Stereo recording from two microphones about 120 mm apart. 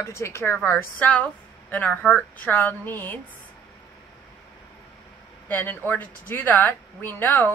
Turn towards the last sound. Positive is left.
turn(degrees=15)  # may be behind; listen again after turning